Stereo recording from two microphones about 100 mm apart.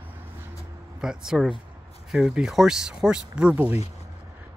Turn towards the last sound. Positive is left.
turn(degrees=-15)  # may be behind; listen again after turning